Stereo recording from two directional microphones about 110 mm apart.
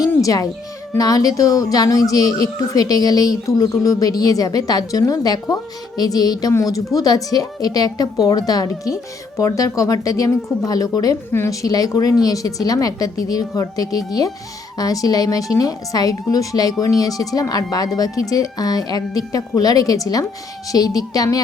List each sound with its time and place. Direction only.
0.2 s speech: 30° left (ahead or behind)
11.3 s speech: 25° left (ahead or behind)